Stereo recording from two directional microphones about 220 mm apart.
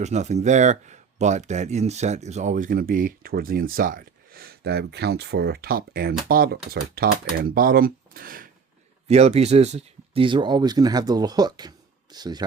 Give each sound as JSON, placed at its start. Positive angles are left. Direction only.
{"t": 0.0, "sound": "speech", "side_deg": -30}
{"t": 9.0, "sound": "speech", "side_deg": -30}